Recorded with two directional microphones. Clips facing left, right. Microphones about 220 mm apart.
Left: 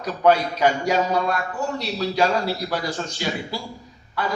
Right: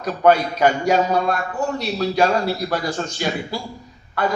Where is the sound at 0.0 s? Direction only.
50° right (ahead or behind).